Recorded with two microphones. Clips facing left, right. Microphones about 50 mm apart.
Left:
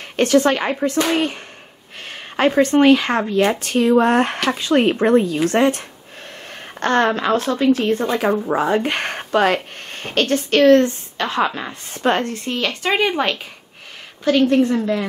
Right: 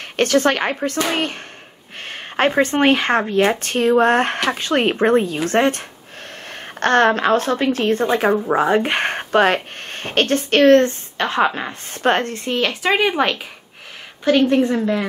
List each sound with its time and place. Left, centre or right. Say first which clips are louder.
0.0 s speech: left 1 dB; right
2.0 s a sound: right 1 dB; right
2.6 s speech: left 5 dB; right
8.5 s speech: right 2 dB; right
11.9 s speech: right 1 dB; right
12.4 s a woman's voice: right 2 dB; right
12.8 s speech: right 1 dB; centre
14.2 s a woman's voice: even; right